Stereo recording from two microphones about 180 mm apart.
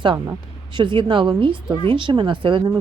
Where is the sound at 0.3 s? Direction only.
25° right (ahead or behind).